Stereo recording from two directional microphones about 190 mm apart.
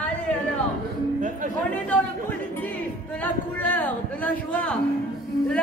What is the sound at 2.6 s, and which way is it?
A man's voice, 10° left (ahead or behind).